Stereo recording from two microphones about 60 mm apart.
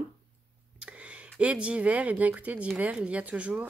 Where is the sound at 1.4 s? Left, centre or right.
Centre.